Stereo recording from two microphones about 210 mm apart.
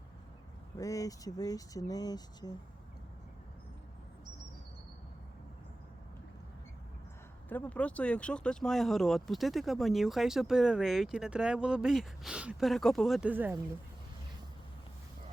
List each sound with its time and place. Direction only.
0.8 s speech: 15° left (ahead or behind)
7.5 s speech: 5° left (ahead or behind); by 13.6 s 10° right (ahead or behind)